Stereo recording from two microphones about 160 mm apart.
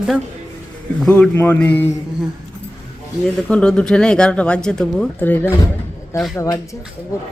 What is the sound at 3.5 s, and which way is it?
Speech, 5° left (ahead or behind).